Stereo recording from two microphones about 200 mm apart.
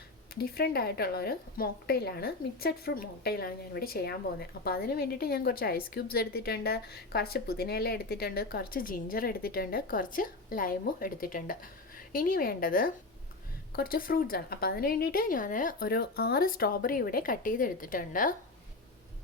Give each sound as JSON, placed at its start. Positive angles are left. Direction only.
{"t": 0.3, "sound": "a woman's voice", "side_deg": 50}